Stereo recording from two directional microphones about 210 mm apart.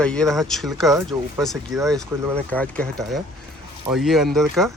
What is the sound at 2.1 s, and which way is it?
Speech, 10° right (ahead or behind).